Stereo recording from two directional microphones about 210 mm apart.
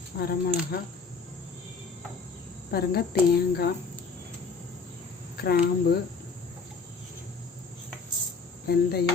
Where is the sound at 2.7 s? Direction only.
45° left (ahead or behind).